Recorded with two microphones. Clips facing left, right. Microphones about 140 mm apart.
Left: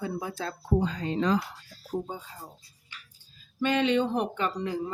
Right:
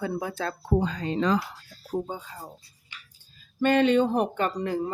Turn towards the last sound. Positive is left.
turn(degrees=-50)  # may be behind; listen again after turning